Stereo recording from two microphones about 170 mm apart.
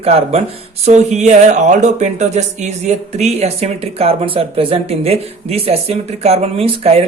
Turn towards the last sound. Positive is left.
turn(degrees=-35)  # may be behind; listen again after turning